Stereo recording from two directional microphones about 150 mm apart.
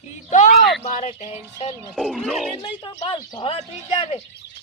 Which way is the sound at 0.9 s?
50° left (ahead or behind).